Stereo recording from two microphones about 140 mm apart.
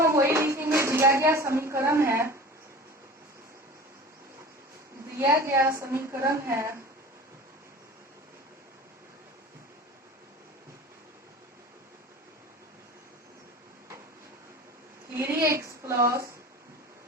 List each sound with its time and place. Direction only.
0.0 s a sound: 20° right (ahead or behind)
5.2 s a woman's voice: 20° right (ahead or behind)
15.1 s a woman's voice: 20° right (ahead or behind)